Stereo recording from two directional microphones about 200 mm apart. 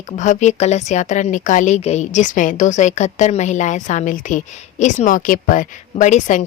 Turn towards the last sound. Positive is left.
turn(degrees=40)  # may be behind; listen again after turning